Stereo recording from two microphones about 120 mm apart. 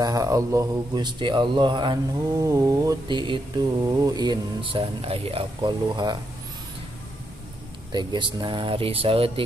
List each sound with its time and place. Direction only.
0.0 s speech: 30° right (ahead or behind)
3.8 s speech: 30° right (ahead or behind)
7.9 s speech: 40° right (ahead or behind)